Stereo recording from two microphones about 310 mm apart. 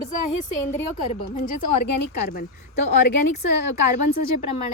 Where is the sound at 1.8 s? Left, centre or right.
Left.